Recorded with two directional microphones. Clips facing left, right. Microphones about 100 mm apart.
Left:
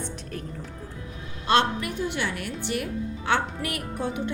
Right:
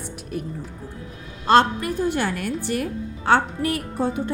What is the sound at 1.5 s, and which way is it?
A woman's voice, 40° right (ahead or behind).